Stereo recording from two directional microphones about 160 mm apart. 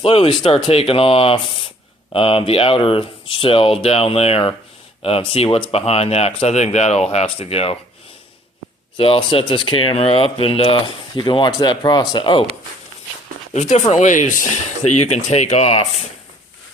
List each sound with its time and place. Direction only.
0.0 s speech: 35° left (ahead or behind)
9.0 s speech: 35° left (ahead or behind)
13.5 s speech: 45° left (ahead or behind)